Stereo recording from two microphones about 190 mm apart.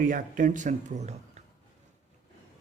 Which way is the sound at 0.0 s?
45° right (ahead or behind).